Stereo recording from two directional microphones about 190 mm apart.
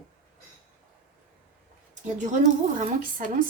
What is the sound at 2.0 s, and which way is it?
Speech, 40° right (ahead or behind).